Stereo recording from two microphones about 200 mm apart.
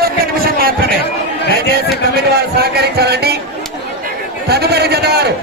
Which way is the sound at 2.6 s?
55° right (ahead or behind).